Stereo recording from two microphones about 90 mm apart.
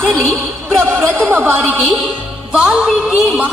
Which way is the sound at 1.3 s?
25° right (ahead or behind).